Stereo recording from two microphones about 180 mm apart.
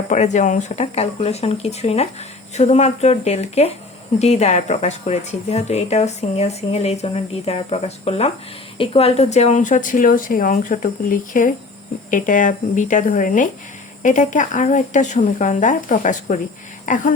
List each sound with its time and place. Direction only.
0.1 s a woman's voice: 40° left (ahead or behind)